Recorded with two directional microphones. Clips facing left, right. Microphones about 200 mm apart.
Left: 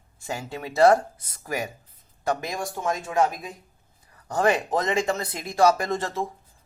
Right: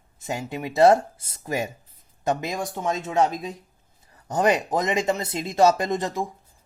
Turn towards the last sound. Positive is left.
turn(degrees=-15)  # may be behind; listen again after turning